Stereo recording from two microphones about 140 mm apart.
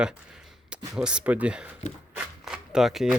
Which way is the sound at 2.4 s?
5° right (ahead or behind).